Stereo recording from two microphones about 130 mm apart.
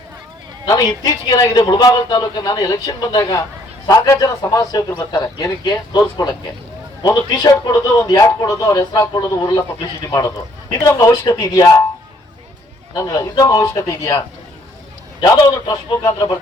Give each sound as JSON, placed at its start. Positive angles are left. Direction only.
{"t": 0.6, "sound": "a man's voice", "side_deg": 30}
{"t": 12.9, "sound": "a man's voice", "side_deg": 25}
{"t": 15.2, "sound": "a man's voice", "side_deg": 30}